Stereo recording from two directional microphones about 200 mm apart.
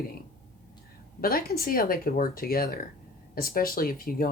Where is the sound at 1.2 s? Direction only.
50° left (ahead or behind).